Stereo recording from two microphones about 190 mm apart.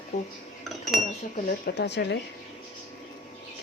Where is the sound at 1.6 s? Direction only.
60° left (ahead or behind).